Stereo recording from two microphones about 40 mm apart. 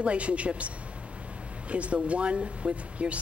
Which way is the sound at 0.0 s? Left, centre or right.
Right.